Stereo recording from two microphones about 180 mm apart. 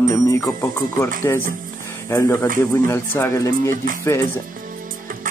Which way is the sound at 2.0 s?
15° left (ahead or behind).